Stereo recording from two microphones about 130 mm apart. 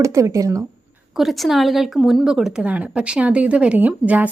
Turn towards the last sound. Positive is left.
turn(degrees=-10)  # may be behind; listen again after turning